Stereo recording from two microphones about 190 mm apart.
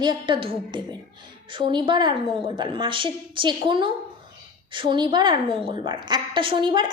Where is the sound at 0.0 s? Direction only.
25° right (ahead or behind).